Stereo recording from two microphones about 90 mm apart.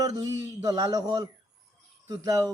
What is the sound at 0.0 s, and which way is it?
A man's voice, 40° right (ahead or behind).